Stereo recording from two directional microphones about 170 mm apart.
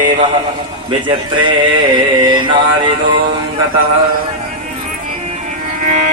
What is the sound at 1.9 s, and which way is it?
Music, 25° right (ahead or behind).